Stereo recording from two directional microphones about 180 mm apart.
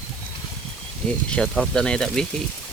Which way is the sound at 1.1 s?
5° left (ahead or behind).